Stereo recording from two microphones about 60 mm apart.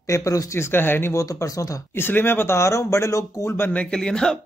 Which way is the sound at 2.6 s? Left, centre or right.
Left.